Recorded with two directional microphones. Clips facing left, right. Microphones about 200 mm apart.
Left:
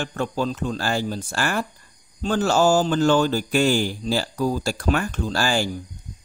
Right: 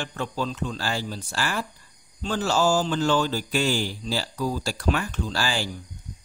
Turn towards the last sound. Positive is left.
turn(degrees=50)  # may be behind; listen again after turning